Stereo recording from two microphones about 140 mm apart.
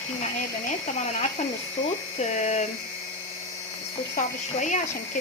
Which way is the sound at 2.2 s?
55° left (ahead or behind).